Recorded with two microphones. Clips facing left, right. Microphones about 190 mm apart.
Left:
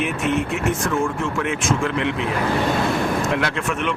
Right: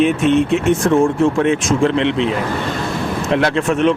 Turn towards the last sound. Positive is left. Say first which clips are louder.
# right 8 dB
turn(degrees=-30)  # may be behind; listen again after turning